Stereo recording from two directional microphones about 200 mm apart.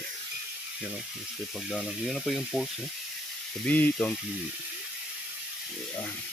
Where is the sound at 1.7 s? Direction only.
Centre (ahead or behind).